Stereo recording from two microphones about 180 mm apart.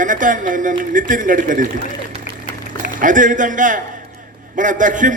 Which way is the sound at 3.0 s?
45° right (ahead or behind).